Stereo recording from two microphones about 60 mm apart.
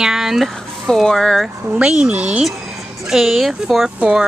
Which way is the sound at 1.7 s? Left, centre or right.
Centre.